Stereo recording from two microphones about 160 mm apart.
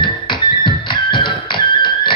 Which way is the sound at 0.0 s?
30° left (ahead or behind).